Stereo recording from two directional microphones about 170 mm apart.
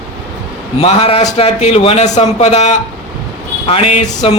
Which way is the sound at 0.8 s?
35° left (ahead or behind).